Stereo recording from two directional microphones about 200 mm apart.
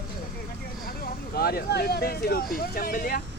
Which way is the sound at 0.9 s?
50° left (ahead or behind).